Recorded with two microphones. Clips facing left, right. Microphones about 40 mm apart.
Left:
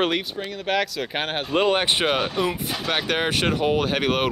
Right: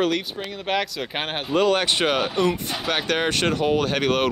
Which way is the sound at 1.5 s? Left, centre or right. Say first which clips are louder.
Right 1 dB; left.